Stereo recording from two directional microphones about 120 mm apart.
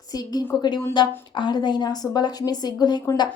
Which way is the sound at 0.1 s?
35° left (ahead or behind).